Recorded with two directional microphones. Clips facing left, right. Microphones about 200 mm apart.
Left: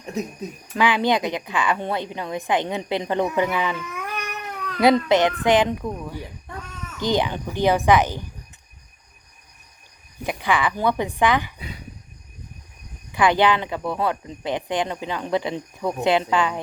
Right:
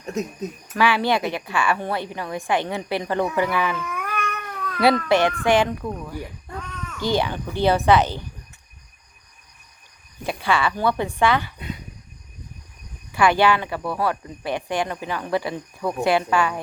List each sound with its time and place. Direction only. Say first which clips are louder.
0.8 s a woman's voice: even; 20° left (ahead or behind)
5.8 s a child's voice: left 1 dB; 5° left (ahead or behind)
7.0 s a child's voice: left 1 dB; 20° left (ahead or behind)
10.2 s a child's voice: even; 15° left (ahead or behind)
13.1 s a woman's voice: even; 20° left (ahead or behind)